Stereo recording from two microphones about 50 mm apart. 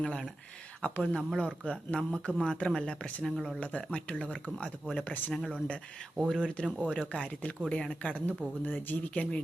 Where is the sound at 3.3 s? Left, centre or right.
Centre.